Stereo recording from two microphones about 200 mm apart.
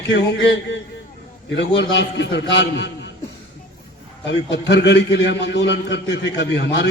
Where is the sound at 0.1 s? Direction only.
60° left (ahead or behind).